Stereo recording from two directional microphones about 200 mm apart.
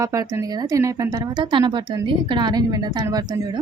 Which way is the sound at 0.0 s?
15° right (ahead or behind).